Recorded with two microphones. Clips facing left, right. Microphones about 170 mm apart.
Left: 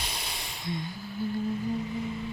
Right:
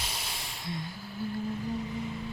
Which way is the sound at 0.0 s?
5° right (ahead or behind).